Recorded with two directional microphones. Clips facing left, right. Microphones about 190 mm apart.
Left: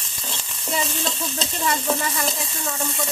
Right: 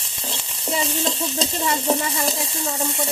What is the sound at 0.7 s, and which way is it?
Stir, 25° right (ahead or behind).